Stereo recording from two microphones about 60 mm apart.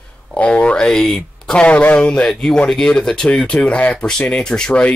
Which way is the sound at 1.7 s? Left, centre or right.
Left.